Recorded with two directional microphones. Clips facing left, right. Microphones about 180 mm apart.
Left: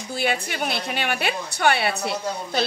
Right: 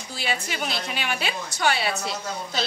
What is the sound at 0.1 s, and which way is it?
A woman's voice, 55° left (ahead or behind).